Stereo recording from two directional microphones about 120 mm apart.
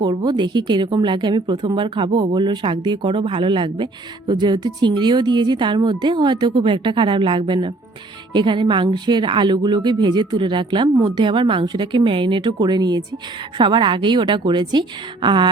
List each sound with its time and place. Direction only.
0.0 s a woman's voice: 35° right (ahead or behind)